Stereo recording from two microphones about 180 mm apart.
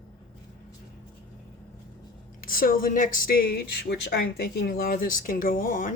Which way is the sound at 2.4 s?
50° left (ahead or behind).